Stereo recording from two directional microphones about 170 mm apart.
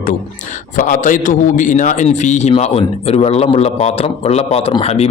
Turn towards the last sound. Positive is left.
turn(degrees=35)  # may be behind; listen again after turning